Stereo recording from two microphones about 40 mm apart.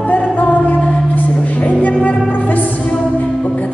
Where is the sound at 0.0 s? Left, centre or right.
Left.